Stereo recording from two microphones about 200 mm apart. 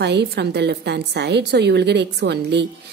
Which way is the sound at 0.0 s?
60° right (ahead or behind).